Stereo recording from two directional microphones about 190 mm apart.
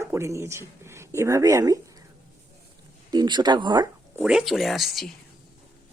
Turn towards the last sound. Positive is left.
turn(degrees=0)  # may be behind; listen again after turning